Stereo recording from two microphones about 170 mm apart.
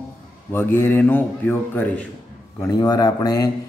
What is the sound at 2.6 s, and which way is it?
Speech, 25° left (ahead or behind).